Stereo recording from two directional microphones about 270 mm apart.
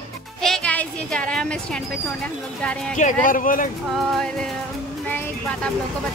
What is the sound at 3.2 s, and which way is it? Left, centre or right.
Speech, left.